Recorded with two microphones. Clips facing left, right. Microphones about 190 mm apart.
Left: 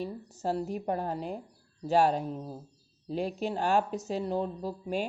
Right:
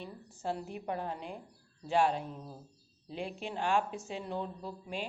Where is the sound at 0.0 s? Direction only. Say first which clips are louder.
Left 6 dB; 40° left (ahead or behind).